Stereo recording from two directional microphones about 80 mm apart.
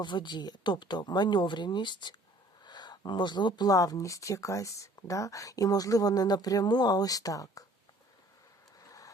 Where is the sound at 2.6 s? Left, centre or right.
Left.